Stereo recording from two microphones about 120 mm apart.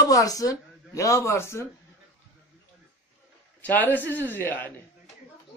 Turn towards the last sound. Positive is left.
turn(degrees=15)  # may be behind; listen again after turning